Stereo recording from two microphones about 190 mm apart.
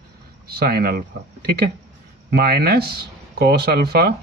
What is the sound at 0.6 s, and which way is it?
Speech, 55° right (ahead or behind).